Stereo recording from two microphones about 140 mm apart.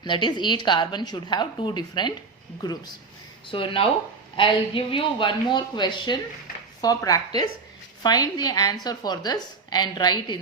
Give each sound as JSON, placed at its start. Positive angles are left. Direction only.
{"t": 0.0, "sound": "a woman's voice", "side_deg": 35}